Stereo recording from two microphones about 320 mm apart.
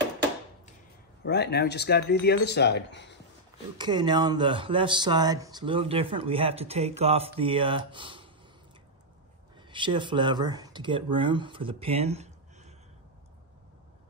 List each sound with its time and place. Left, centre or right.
1.2 s speech: left
3.7 s speech: centre
9.6 s speech: centre